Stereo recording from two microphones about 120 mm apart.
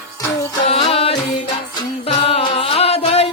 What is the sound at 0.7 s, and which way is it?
Music, 55° left (ahead or behind).